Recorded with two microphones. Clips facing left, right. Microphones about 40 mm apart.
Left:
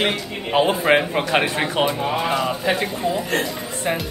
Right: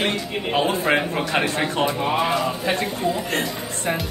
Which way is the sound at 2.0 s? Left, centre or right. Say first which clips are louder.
Right 1 dB; centre.